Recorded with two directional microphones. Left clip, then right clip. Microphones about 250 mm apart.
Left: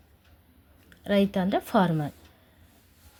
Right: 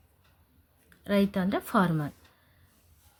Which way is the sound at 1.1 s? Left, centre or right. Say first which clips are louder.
Left 3 dB; centre.